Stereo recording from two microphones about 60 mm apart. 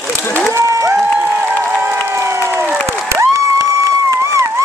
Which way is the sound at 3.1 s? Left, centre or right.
Right.